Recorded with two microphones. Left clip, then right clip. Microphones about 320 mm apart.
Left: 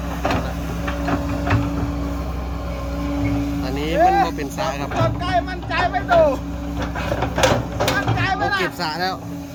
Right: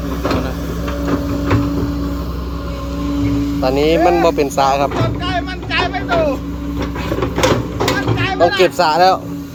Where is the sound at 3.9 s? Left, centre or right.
Centre.